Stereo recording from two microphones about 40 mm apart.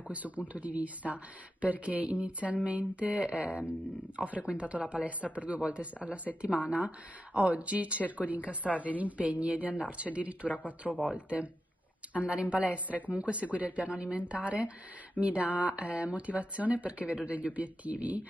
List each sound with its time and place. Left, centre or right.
0.1 s speech: right
10.8 s speech: centre
11.1 s speech: right